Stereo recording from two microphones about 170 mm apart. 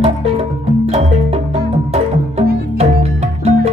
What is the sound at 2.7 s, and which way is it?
Music, 35° right (ahead or behind).